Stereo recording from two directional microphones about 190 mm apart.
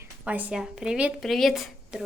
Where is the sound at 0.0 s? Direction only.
10° right (ahead or behind).